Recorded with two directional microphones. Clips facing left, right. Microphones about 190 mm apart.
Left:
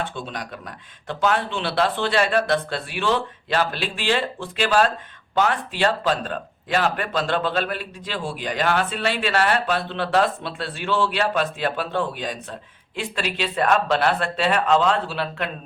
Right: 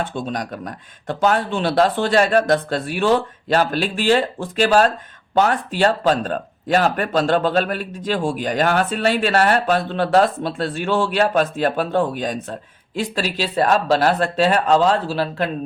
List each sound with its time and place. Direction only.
0.0 s speech: 45° right (ahead or behind)